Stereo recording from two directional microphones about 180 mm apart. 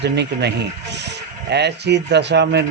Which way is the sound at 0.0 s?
70° right (ahead or behind).